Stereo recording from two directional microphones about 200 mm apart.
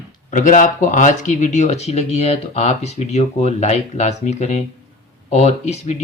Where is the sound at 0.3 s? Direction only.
40° left (ahead or behind).